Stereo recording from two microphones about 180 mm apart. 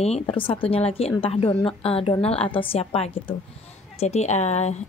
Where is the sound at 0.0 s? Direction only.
35° left (ahead or behind).